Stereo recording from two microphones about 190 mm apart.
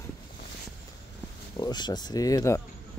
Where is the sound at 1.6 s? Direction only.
20° left (ahead or behind).